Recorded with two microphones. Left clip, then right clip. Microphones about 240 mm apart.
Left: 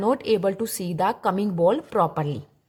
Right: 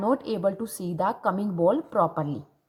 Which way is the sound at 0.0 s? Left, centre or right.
Left.